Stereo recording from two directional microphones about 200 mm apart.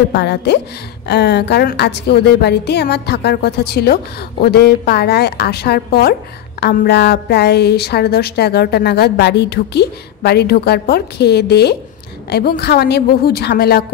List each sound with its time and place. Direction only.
0.1 s a woman's voice: 55° left (ahead or behind)